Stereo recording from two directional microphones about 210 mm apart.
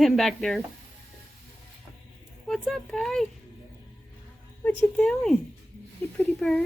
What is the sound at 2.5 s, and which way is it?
Speech, centre (ahead or behind).